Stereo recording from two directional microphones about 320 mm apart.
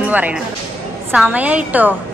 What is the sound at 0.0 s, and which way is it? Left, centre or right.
Speech, centre.